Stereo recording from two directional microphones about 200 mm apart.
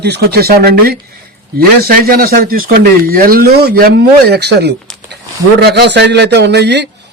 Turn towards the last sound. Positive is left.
turn(degrees=-60)  # may be behind; listen again after turning